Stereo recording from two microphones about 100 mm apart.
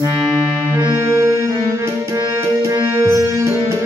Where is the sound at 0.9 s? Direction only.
30° right (ahead or behind).